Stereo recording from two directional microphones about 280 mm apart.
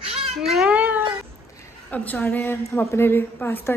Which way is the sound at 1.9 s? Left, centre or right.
Centre.